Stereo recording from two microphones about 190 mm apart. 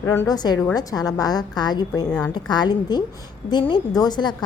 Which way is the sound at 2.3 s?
20° left (ahead or behind).